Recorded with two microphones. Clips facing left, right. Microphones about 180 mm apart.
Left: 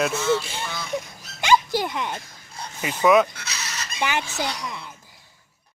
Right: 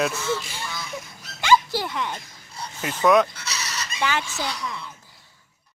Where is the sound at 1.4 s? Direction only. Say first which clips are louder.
Even; 15° left (ahead or behind).